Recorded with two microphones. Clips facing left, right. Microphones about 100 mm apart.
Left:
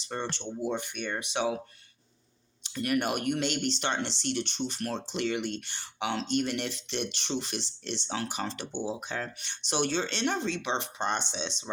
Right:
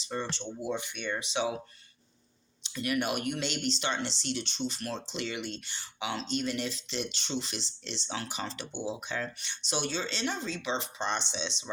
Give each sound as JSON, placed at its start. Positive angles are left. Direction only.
{"t": 0.0, "sound": "speech", "side_deg": 55}
{"t": 2.6, "sound": "speech", "side_deg": 50}